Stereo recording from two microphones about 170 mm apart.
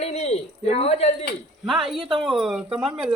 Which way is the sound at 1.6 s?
Centre (ahead or behind).